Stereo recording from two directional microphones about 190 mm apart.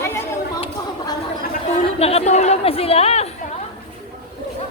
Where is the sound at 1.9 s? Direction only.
30° left (ahead or behind).